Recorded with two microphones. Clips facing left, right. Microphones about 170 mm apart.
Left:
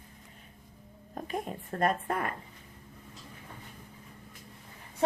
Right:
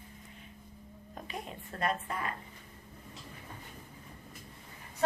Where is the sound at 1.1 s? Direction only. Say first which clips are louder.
Left 7 dB; 45° left (ahead or behind).